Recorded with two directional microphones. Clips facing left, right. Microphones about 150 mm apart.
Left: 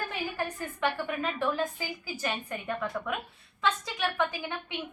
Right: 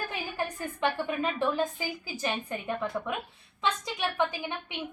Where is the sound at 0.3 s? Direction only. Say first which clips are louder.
Right 1 dB; 15° right (ahead or behind).